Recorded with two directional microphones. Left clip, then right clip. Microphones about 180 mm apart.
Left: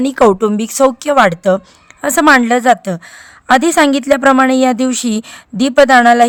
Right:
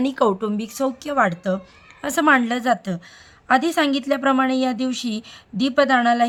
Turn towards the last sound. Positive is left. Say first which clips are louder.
# left 10 dB
turn(degrees=40)  # may be behind; listen again after turning